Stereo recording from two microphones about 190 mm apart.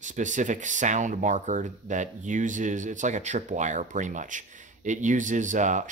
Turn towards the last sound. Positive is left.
turn(degrees=-40)  # may be behind; listen again after turning